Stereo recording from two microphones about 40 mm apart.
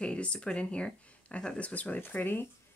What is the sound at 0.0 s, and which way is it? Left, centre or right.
Speech, left.